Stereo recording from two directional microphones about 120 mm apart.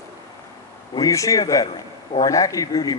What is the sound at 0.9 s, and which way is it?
Speech, 30° left (ahead or behind).